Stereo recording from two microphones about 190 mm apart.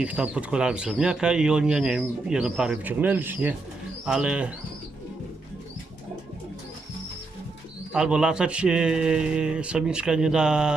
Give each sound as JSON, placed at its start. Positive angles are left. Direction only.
{"t": 0.0, "sound": "speech", "side_deg": -5}
{"t": 7.9, "sound": "speech", "side_deg": -5}